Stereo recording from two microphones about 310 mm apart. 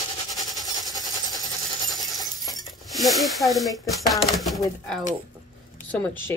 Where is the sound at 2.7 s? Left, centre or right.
Centre.